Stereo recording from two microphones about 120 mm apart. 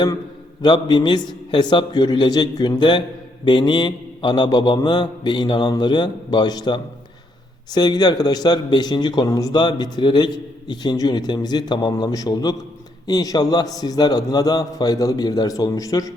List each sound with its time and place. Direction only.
0.6 s a man's voice: 40° left (ahead or behind)